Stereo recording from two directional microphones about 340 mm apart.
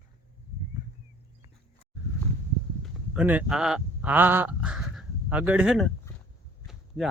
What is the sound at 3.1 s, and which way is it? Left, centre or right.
Speech, centre.